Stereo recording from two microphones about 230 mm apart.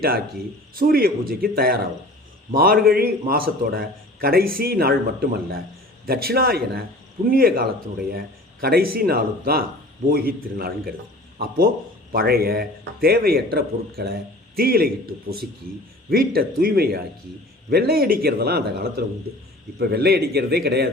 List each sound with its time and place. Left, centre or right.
0.8 s a man's voice: right